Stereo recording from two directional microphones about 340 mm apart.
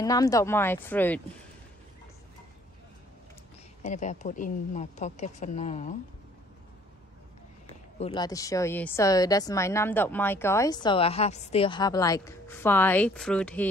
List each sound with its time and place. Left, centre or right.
0.0 s speech: centre
3.8 s speech: left
8.0 s speech: centre